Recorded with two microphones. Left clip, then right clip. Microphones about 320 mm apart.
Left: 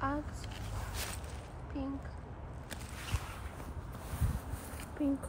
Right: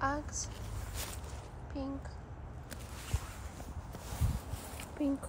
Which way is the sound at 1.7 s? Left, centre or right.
Centre.